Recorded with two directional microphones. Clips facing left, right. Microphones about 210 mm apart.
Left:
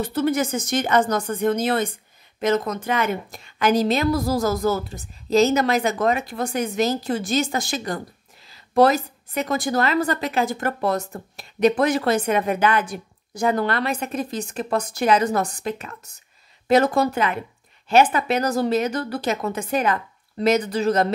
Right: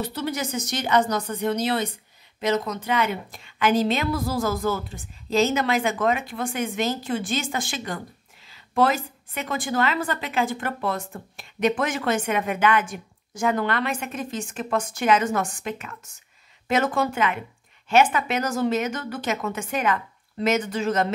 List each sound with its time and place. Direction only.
0.0 s a woman's voice: 50° left (ahead or behind)